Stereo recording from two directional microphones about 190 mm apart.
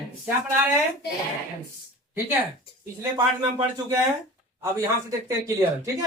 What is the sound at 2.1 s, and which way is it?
Speech, 10° right (ahead or behind).